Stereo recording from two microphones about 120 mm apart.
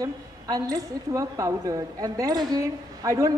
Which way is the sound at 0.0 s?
30° right (ahead or behind).